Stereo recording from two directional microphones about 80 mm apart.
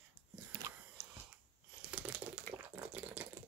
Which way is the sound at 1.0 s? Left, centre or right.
Centre.